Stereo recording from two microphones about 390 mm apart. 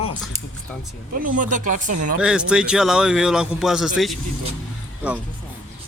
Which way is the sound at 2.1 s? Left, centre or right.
Centre.